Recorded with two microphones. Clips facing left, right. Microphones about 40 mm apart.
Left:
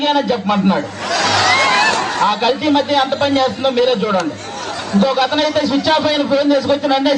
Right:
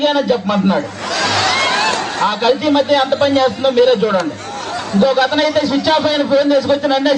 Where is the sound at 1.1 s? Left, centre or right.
Left.